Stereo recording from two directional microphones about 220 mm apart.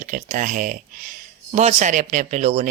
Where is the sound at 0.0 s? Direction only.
35° right (ahead or behind).